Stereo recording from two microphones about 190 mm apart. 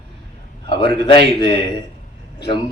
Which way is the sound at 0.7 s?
60° right (ahead or behind).